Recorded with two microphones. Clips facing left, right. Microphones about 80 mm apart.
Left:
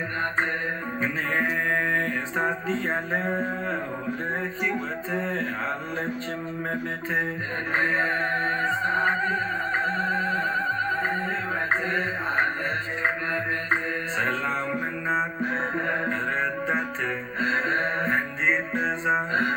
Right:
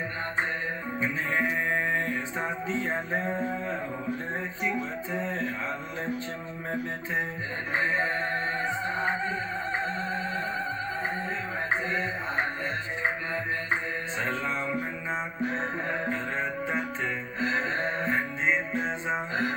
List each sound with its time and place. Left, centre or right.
1.6 s music: left
5.1 s music: left
7.7 s music: left
14.2 s music: left